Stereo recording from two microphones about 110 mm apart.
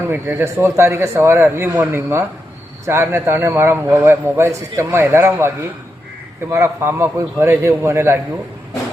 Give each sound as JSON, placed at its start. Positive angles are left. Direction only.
{"t": 0.0, "sound": "a man's voice", "side_deg": -20}